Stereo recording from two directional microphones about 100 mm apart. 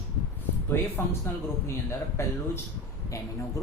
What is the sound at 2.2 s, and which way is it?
Speech, 25° left (ahead or behind).